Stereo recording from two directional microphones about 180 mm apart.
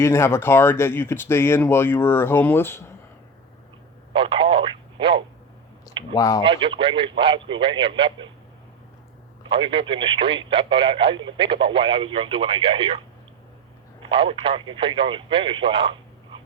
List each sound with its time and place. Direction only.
0.0 s speech: 15° left (ahead or behind)
4.1 s telephone: 30° right (ahead or behind)
5.9 s a sound: 25° right (ahead or behind)
6.1 s speech: 20° left (ahead or behind)
6.4 s speech: 25° right (ahead or behind)
9.5 s speech: 30° right (ahead or behind)
14.0 s speech: 30° right (ahead or behind)